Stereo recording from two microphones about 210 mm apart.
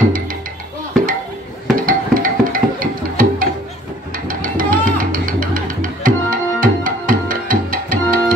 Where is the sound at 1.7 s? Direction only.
40° right (ahead or behind).